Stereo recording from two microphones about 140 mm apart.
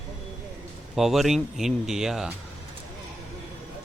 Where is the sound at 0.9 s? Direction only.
Centre (ahead or behind).